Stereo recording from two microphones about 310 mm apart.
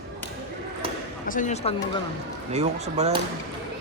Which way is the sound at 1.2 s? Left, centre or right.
Left.